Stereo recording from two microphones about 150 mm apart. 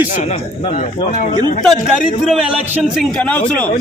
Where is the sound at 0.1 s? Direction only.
55° left (ahead or behind).